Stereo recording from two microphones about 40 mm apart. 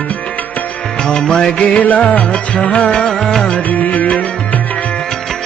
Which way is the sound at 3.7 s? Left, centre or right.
Left.